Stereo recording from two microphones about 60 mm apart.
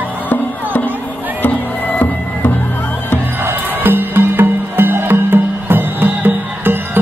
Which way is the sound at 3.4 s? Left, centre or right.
Right.